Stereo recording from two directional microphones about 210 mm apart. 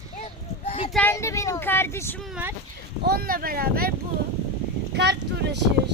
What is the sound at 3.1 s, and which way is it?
Speech, 45° right (ahead or behind).